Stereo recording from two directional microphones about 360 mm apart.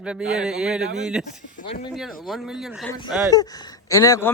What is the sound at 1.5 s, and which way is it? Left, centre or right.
Speech, centre.